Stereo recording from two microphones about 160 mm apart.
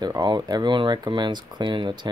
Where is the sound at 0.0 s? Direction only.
25° right (ahead or behind).